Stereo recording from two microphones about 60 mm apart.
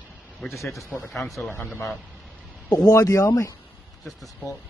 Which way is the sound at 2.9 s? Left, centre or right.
Left.